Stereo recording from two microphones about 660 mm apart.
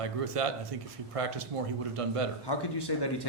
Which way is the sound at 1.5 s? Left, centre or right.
Right.